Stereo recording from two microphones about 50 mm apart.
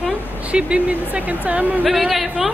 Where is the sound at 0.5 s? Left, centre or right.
Right.